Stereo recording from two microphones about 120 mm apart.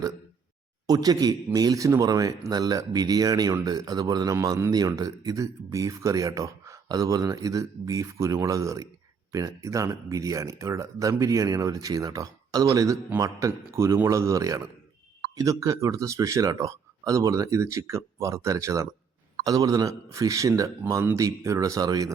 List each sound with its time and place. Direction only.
0.9 s a man's voice: 30° right (ahead or behind)